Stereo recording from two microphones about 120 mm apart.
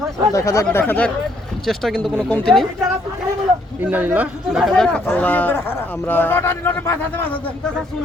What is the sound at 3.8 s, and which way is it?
Speech, 15° right (ahead or behind).